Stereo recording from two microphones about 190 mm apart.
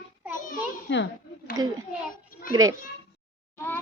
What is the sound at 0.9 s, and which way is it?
Speech, 70° left (ahead or behind).